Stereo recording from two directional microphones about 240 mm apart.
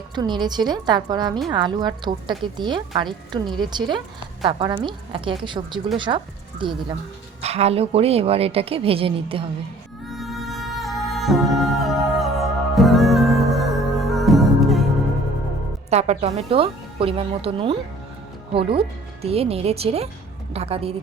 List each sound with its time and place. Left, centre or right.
0.2 s a woman's voice: centre
10.1 s music: centre
15.9 s a woman's voice: right
18.8 s a woman's voice: right